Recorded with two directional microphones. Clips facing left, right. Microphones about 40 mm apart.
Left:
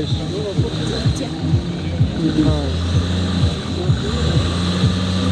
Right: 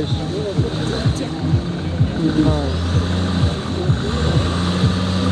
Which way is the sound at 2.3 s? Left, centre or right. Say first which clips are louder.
Right 1 dB; left.